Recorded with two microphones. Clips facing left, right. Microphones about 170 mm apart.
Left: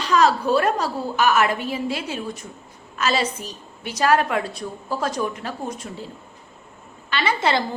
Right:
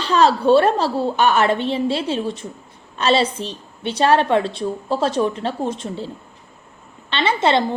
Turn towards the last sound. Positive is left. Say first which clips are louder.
# right 4 dB
turn(degrees=-25)  # may be behind; listen again after turning